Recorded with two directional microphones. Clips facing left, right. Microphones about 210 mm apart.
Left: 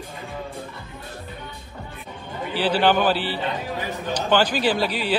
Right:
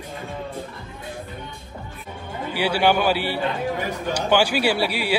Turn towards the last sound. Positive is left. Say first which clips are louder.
# even
turn(degrees=-10)  # may be behind; listen again after turning